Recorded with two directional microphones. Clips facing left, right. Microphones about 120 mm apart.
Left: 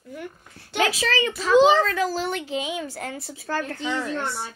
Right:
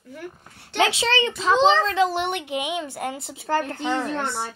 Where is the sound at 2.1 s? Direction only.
65° right (ahead or behind).